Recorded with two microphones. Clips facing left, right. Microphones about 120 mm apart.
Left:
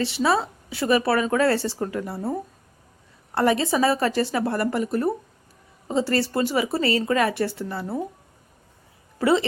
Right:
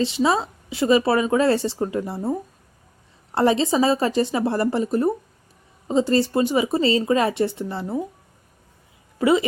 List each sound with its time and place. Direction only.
0.0 s speech: 20° right (ahead or behind)
3.3 s speech: 25° right (ahead or behind)
9.1 s speech: 15° right (ahead or behind)